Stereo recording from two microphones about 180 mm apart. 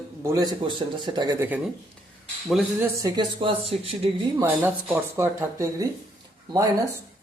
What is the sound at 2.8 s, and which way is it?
Speech, 20° right (ahead or behind).